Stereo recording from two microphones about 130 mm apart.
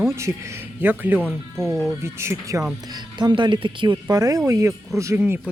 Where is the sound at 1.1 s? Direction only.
5° left (ahead or behind).